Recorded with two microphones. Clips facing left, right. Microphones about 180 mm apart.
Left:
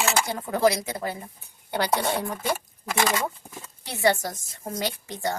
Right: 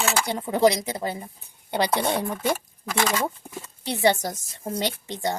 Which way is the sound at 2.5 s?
10° left (ahead or behind).